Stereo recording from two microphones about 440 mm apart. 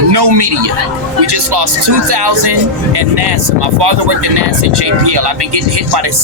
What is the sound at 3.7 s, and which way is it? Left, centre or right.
Speech, right.